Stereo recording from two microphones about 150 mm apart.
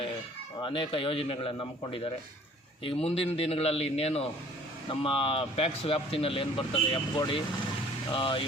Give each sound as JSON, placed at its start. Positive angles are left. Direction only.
{"t": 0.6, "sound": "speech", "side_deg": 35}